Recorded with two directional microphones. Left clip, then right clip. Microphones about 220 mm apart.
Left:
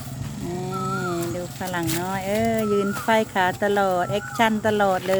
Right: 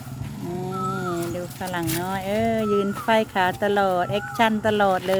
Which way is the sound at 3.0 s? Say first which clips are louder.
Even; 5° right (ahead or behind).